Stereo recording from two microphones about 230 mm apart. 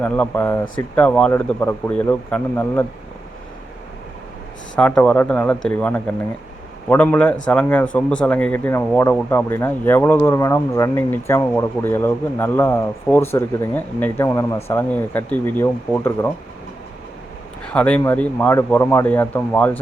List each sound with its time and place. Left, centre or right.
0.0 s speech: centre
4.8 s a man's voice: centre
17.7 s speech: centre